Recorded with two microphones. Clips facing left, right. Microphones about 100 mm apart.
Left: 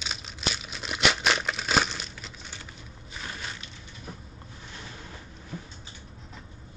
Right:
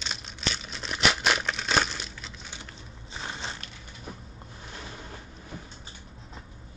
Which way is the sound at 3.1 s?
25° right (ahead or behind).